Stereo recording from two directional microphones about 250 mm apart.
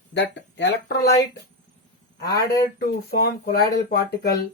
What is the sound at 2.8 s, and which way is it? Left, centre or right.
Speech, left.